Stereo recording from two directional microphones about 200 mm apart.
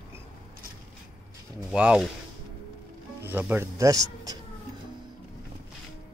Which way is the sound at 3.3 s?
10° right (ahead or behind).